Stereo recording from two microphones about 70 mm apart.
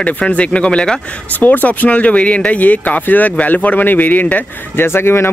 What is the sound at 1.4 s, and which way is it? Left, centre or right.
Speech, left.